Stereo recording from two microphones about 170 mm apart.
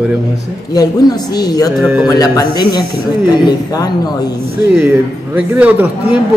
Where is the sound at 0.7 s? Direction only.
20° left (ahead or behind).